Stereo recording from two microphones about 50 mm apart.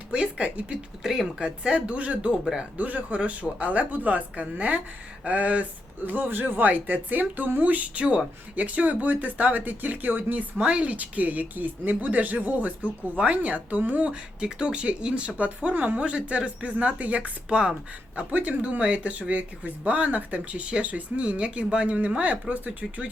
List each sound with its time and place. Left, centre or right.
0.1 s speech: right
1.0 s speech: centre
1.6 s speech: right
6.1 s speech: right
10.6 s speech: right
14.1 s speech: centre
18.2 s speech: right